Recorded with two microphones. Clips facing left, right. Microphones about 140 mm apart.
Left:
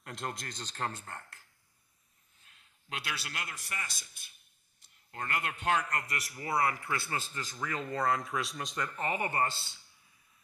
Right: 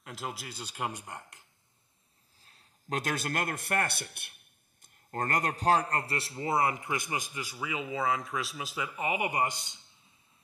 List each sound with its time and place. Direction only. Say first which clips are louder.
0.0 s speech: even; 5° right (ahead or behind)
2.4 s a man's voice: right 10 dB; 35° right (ahead or behind); by 9.9 s 20° right (ahead or behind)